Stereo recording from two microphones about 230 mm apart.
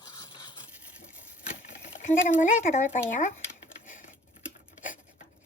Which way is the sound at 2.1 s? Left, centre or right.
Left.